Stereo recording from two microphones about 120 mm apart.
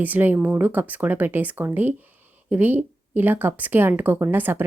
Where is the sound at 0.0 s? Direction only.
15° right (ahead or behind).